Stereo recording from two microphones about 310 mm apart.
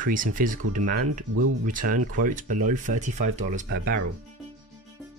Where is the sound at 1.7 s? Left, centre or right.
Right.